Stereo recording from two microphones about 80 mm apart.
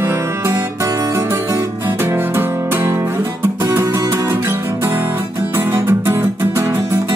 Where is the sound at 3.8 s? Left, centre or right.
Right.